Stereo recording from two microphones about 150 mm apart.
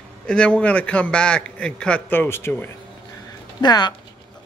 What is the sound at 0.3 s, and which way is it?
A man's voice, 5° left (ahead or behind).